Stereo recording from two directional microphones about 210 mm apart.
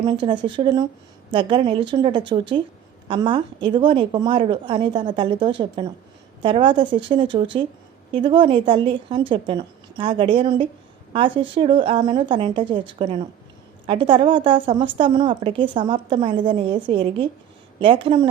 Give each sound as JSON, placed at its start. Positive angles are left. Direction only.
{"t": 0.0, "sound": "a woman's voice", "side_deg": -20}